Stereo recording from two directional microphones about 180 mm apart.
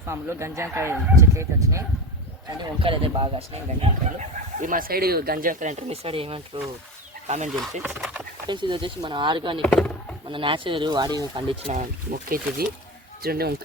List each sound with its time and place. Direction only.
0.1 s speech: 15° right (ahead or behind)
2.8 s speech: 30° right (ahead or behind)
7.5 s speech: 5° right (ahead or behind)
8.4 s speech: 25° right (ahead or behind)
9.6 s speech: 5° left (ahead or behind)
10.2 s speech: 30° right (ahead or behind)
11.6 s speech: 45° right (ahead or behind)